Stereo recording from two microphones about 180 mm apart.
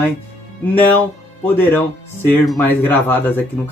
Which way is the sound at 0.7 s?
10° left (ahead or behind).